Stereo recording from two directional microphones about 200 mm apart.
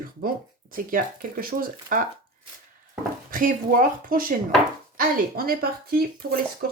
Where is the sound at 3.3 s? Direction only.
45° right (ahead or behind).